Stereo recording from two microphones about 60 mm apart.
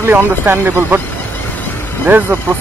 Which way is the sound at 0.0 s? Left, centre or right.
Right.